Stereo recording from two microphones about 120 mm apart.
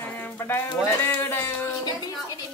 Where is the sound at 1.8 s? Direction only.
35° left (ahead or behind).